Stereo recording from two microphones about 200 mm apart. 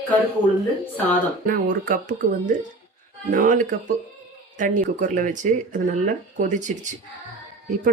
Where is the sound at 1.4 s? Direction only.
45° right (ahead or behind).